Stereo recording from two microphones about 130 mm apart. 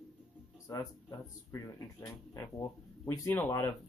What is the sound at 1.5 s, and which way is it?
Speech, 25° left (ahead or behind).